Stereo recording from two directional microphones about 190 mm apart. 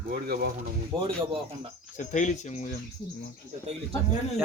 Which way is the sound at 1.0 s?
30° right (ahead or behind).